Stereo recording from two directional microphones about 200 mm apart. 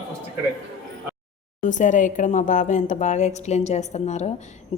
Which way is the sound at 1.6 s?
40° left (ahead or behind).